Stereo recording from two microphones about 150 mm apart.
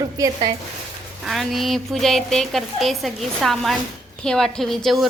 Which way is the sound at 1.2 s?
Centre (ahead or behind).